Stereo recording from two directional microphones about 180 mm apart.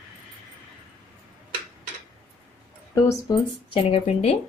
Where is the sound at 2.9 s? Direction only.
20° left (ahead or behind).